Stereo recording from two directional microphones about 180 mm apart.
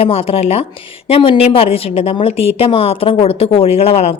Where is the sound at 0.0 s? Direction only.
30° left (ahead or behind).